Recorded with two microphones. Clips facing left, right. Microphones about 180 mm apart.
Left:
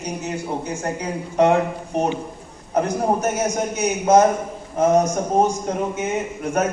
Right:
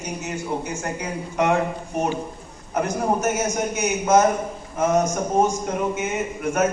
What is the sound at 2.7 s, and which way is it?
A man's voice, 30° left (ahead or behind).